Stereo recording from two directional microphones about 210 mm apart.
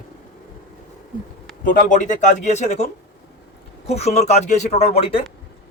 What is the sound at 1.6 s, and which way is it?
Speech, 40° left (ahead or behind).